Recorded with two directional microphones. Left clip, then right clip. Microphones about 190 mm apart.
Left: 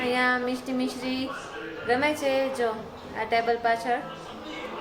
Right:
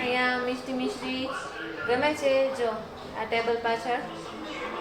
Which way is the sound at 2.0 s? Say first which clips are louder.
Right 3 dB; 40° left (ahead or behind).